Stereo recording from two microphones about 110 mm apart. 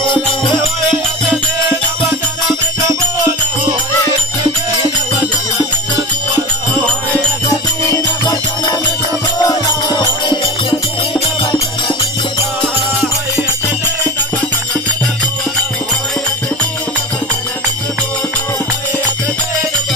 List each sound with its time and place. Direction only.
9.4 s music: 35° left (ahead or behind)